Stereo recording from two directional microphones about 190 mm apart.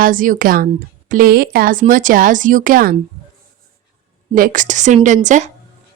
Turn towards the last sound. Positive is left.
turn(degrees=-40)  # may be behind; listen again after turning